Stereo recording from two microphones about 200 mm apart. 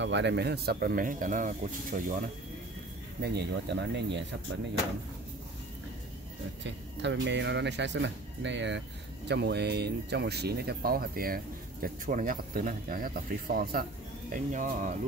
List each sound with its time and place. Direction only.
0.0 s speech: 60° right (ahead or behind); by 2.1 s 45° right (ahead or behind)
3.2 s speech: 55° right (ahead or behind)
6.6 s speech: 65° right (ahead or behind); by 15.0 s 40° right (ahead or behind)